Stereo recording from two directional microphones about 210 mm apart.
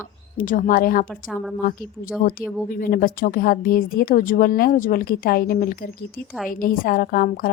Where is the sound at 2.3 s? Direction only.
40° left (ahead or behind).